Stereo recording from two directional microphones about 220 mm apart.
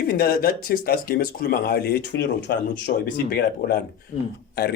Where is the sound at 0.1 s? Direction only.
45° left (ahead or behind).